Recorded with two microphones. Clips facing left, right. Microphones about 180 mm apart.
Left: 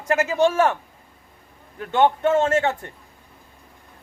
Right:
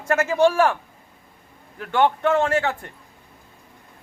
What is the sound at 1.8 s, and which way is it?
Speech, 20° left (ahead or behind).